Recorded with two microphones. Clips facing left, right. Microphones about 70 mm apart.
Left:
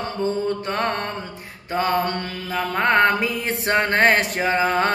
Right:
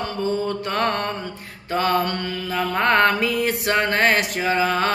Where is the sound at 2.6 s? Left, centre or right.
Centre.